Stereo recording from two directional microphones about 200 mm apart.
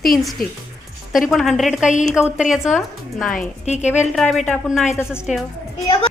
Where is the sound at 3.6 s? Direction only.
35° left (ahead or behind).